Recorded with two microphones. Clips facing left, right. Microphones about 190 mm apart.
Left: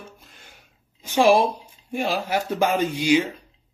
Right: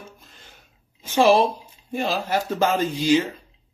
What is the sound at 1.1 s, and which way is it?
Speech, 10° left (ahead or behind).